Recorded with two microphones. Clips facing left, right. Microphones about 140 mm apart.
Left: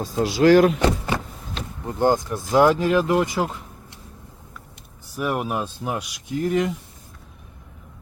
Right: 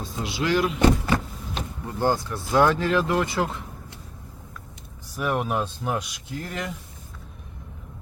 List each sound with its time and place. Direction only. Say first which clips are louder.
0.0 s speech: left 10 dB; 40° left (ahead or behind)
1.9 s speech: left 4 dB; 20° left (ahead or behind)
5.1 s speech: left 1 dB; 5° left (ahead or behind)